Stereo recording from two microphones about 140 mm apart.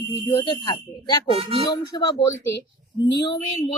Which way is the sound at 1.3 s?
40° right (ahead or behind).